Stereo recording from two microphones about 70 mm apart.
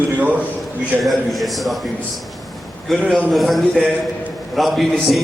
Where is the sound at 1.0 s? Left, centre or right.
Centre.